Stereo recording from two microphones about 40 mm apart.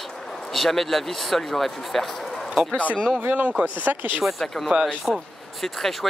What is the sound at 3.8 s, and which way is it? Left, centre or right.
Speech, right.